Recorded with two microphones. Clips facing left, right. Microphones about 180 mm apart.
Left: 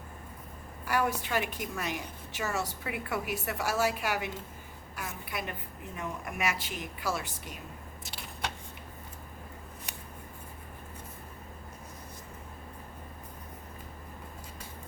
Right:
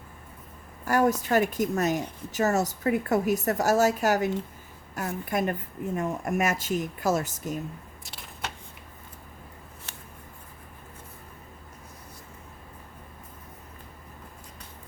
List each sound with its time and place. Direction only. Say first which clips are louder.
0.9 s a woman's voice: right 7 dB; 45° right (ahead or behind)
8.0 s a sound: left 1 dB; centre (ahead or behind)
9.9 s scissors: even; 15° left (ahead or behind)